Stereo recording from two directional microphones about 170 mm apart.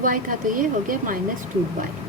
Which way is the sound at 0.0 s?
55° right (ahead or behind).